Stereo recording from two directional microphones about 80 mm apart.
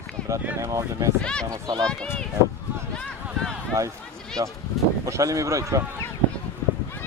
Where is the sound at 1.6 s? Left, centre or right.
Right.